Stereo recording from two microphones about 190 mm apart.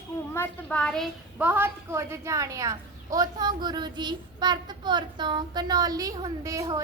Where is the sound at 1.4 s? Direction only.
10° right (ahead or behind).